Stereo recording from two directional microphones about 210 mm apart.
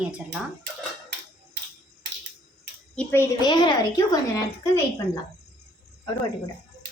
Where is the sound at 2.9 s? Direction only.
10° left (ahead or behind).